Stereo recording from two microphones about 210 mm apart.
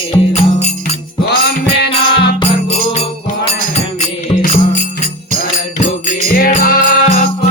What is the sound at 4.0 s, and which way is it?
Music, 35° left (ahead or behind).